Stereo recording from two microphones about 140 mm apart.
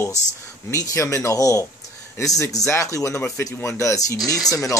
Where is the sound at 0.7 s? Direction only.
20° left (ahead or behind).